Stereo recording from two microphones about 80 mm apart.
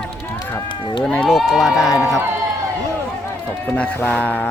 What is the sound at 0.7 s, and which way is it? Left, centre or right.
Speech, left.